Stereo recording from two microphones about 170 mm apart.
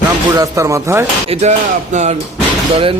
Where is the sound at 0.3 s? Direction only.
20° right (ahead or behind).